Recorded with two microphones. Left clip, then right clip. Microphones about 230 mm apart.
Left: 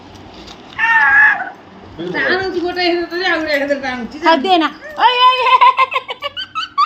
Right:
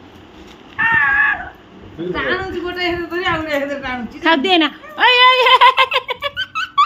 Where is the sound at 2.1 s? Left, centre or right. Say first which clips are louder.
Left 4 dB; right.